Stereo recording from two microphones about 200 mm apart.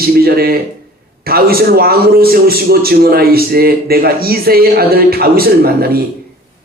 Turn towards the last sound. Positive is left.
turn(degrees=-50)  # may be behind; listen again after turning